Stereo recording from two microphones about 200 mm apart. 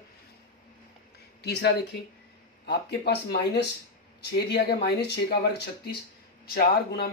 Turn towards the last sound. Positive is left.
turn(degrees=50)  # may be behind; listen again after turning